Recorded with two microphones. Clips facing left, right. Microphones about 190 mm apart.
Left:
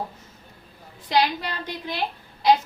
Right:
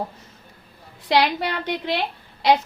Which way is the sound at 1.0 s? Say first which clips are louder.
Right 3 dB; 70° right (ahead or behind).